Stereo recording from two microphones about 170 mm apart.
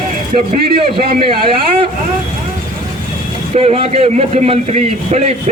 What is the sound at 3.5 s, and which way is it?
A man's voice, 40° right (ahead or behind).